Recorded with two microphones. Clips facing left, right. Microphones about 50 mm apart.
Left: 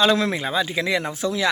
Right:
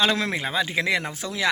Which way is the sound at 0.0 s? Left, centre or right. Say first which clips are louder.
Left 4 dB; right.